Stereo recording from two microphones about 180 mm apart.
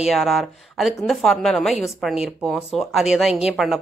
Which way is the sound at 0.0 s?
Centre (ahead or behind).